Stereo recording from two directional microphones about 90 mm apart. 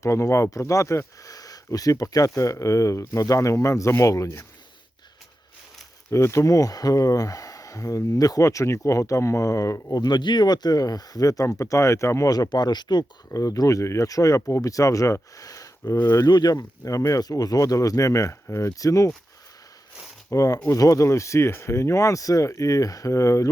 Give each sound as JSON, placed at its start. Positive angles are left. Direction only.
{"t": 0.0, "sound": "speech", "side_deg": 35}
{"t": 6.1, "sound": "speech", "side_deg": 30}
{"t": 9.9, "sound": "speech", "side_deg": 50}
{"t": 20.3, "sound": "speech", "side_deg": 40}